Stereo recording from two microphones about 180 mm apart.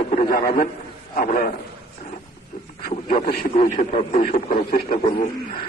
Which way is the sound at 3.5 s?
40° left (ahead or behind).